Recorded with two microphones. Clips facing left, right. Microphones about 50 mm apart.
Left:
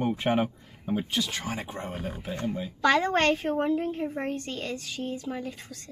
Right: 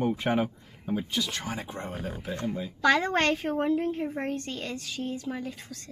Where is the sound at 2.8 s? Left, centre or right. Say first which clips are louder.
Left 1 dB; centre.